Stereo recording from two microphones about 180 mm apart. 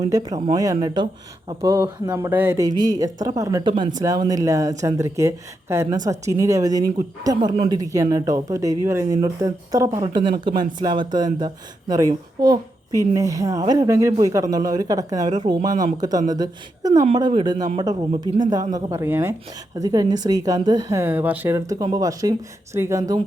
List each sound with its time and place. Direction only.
0.0 s a woman's voice: 20° right (ahead or behind)
18.9 s a woman's voice: 15° right (ahead or behind)